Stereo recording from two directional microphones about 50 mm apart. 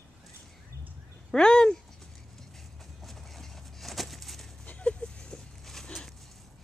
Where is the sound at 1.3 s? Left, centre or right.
Centre.